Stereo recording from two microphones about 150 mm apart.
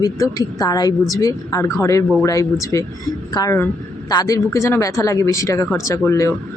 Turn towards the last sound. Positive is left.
turn(degrees=20)  # may be behind; listen again after turning